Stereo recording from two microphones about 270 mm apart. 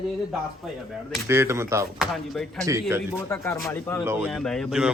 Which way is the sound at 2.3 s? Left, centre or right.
Centre.